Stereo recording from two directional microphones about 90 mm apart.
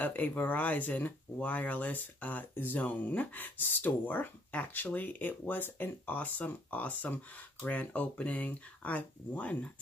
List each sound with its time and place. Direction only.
0.0 s speech: 20° left (ahead or behind)